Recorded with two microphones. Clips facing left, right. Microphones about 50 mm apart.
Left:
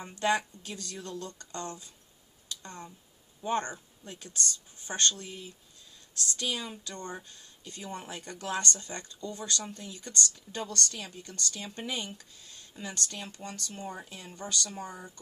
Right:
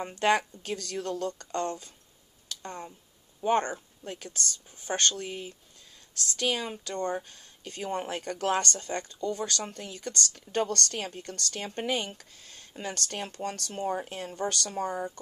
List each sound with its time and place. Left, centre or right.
0.0 s speech: right
2.6 s speech: right
4.0 s speech: right
13.4 s speech: right